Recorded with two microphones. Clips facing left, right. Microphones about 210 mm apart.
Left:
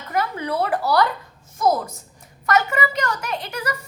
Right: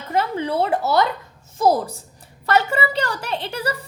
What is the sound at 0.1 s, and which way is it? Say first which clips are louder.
A woman's voice: right 2 dB; 25° right (ahead or behind).